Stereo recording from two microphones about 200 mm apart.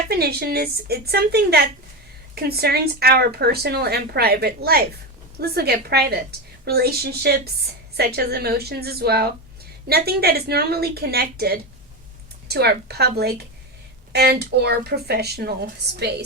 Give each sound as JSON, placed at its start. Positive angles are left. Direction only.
{"t": 0.1, "sound": "speech", "side_deg": -50}